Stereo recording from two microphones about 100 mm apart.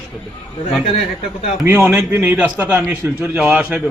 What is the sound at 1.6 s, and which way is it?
A man's voice, 20° right (ahead or behind).